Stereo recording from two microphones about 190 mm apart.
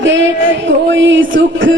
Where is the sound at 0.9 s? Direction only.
75° right (ahead or behind).